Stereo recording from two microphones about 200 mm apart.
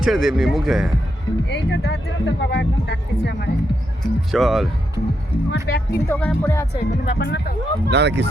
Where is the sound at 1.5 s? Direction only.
60° left (ahead or behind).